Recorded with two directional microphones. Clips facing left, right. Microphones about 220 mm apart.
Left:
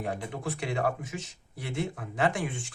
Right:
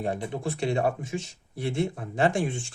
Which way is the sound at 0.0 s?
25° right (ahead or behind).